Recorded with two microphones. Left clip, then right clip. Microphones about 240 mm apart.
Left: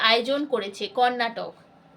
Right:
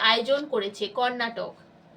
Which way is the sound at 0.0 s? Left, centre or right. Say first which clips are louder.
Left 1 dB; left.